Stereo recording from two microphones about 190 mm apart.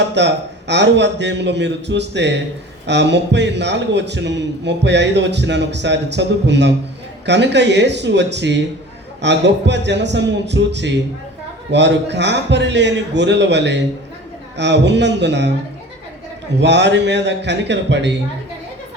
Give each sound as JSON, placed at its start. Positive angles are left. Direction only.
{"t": 0.0, "sound": "a man's voice", "side_deg": -65}
{"t": 16.6, "sound": "a man's voice", "side_deg": -65}